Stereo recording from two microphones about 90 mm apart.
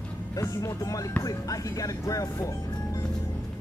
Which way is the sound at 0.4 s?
40° left (ahead or behind).